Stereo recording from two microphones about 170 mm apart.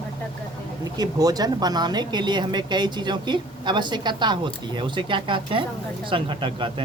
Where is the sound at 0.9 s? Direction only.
20° right (ahead or behind).